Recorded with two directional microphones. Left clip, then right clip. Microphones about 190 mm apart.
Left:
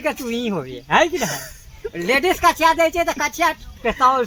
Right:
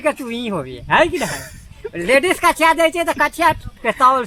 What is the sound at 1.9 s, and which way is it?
Speech, 35° right (ahead or behind).